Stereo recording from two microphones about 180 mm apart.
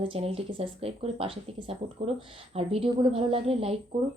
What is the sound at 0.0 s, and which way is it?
Speech, 30° right (ahead or behind).